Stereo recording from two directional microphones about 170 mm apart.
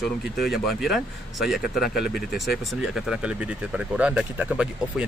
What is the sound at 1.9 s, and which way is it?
Speech, 65° left (ahead or behind).